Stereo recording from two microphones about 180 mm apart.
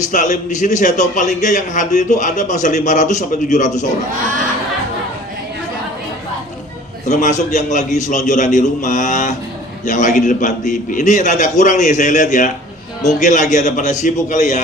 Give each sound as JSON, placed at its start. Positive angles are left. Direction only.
{"t": 0.1, "sound": "a man's voice", "side_deg": 45}
{"t": 7.1, "sound": "a man's voice", "side_deg": 40}